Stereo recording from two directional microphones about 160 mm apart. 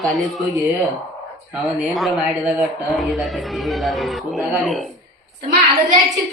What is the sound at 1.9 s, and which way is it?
Speech, centre (ahead or behind).